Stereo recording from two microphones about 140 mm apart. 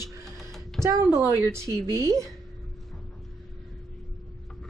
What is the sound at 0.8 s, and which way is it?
A woman's voice, 20° right (ahead or behind).